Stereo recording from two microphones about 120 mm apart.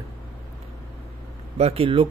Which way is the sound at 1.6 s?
60° right (ahead or behind).